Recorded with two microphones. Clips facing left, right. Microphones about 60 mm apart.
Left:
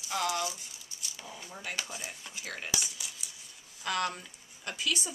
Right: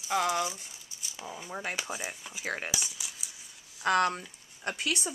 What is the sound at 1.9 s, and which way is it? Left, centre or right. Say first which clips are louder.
Speech: right 5 dB; right.